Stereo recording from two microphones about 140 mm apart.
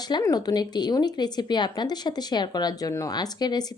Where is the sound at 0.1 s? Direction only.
25° left (ahead or behind).